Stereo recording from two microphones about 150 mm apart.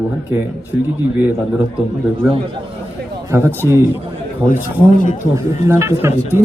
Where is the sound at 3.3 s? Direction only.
15° right (ahead or behind).